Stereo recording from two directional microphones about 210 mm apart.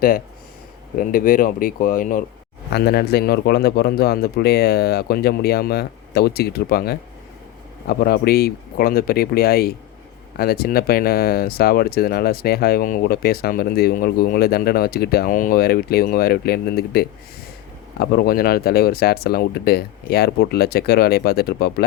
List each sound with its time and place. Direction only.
0.9 s speech: 40° left (ahead or behind)